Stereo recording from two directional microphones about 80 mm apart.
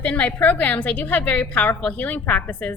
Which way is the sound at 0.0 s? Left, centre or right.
Centre.